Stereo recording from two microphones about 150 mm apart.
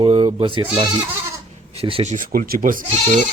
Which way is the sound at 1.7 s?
40° right (ahead or behind).